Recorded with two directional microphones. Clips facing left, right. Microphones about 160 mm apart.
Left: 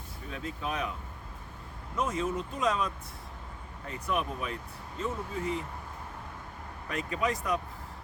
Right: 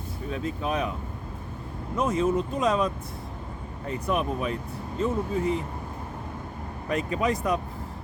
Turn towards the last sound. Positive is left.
turn(degrees=-25)  # may be behind; listen again after turning